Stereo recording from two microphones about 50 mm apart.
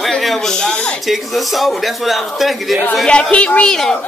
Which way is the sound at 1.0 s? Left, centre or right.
Centre.